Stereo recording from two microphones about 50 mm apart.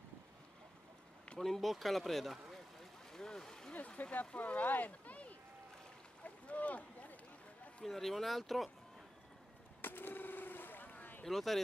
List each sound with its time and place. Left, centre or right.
1.4 s a sound: centre
3.7 s speech: left
6.2 s boat: left
7.8 s speech: centre
9.8 s a sound: left
11.2 s speech: centre